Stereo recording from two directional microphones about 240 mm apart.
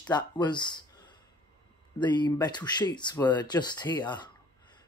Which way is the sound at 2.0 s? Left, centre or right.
Centre.